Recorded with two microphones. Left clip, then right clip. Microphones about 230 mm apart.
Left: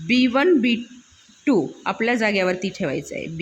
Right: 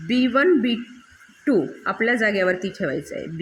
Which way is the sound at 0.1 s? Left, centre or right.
Left.